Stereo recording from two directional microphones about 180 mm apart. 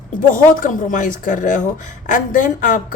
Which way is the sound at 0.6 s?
45° left (ahead or behind).